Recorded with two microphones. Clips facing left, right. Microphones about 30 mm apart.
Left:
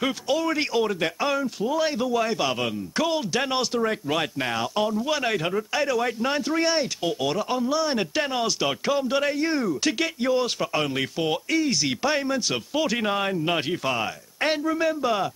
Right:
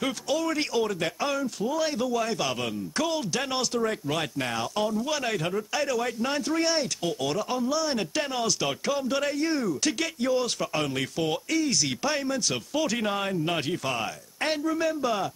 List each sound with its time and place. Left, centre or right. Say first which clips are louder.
0.0 s speech: left 3 dB; centre